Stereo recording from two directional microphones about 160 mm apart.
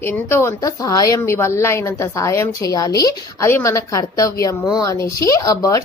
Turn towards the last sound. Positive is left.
turn(degrees=20)  # may be behind; listen again after turning